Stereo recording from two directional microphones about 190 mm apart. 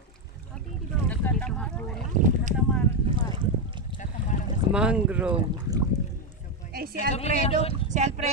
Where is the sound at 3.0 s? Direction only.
25° right (ahead or behind).